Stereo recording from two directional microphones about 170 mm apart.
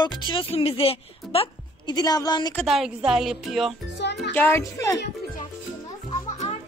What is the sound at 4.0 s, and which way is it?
Music, 90° left.